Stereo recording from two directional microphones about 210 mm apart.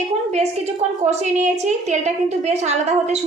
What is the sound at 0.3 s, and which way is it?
A woman's voice, 30° right (ahead or behind).